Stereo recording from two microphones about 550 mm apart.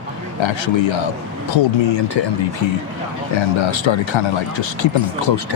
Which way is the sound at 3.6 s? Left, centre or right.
Left.